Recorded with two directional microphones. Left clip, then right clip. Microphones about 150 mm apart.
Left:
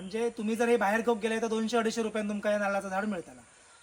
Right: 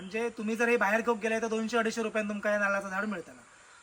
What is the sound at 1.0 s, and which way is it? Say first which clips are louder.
Speech: even; 25° left (ahead or behind).